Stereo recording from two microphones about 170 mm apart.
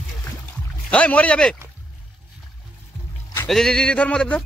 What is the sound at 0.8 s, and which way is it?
Speech, 10° left (ahead or behind).